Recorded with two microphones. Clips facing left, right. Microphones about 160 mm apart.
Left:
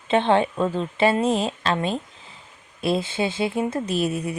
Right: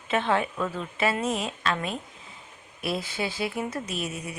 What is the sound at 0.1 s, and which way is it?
A woman's voice, 30° left (ahead or behind).